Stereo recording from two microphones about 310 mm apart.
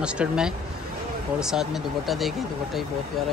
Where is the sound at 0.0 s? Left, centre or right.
Centre.